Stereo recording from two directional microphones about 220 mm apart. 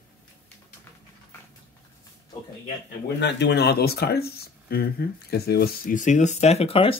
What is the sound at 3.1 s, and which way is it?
Speech, 50° left (ahead or behind).